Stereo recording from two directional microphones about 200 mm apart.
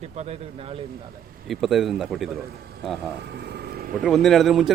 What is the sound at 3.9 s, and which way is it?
Speech, centre (ahead or behind).